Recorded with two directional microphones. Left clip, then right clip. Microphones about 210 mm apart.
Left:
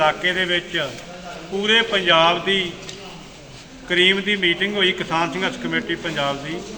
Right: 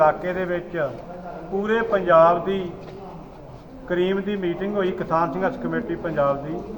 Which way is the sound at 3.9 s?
35° left (ahead or behind).